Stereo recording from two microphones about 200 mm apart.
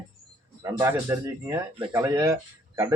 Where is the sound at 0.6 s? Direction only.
15° right (ahead or behind).